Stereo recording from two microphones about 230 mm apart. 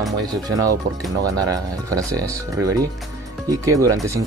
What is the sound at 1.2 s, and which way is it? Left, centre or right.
Speech, centre.